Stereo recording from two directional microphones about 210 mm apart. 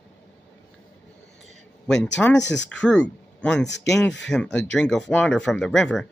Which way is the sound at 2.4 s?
55° left (ahead or behind).